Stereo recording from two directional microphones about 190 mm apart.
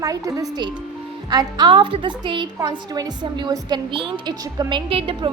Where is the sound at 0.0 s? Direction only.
20° right (ahead or behind).